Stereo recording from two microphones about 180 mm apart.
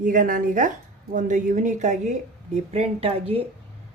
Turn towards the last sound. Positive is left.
turn(degrees=-30)  # may be behind; listen again after turning